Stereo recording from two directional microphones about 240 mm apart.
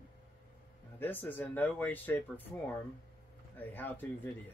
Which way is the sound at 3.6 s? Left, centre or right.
Centre.